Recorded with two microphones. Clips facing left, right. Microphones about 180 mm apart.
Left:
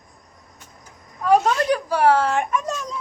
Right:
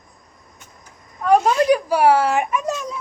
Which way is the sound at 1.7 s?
10° right (ahead or behind).